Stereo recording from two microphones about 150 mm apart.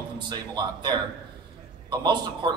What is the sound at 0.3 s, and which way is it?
A man's voice, 30° right (ahead or behind).